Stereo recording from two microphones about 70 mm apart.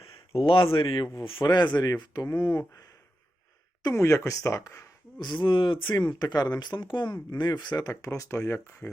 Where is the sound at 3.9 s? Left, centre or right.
Left.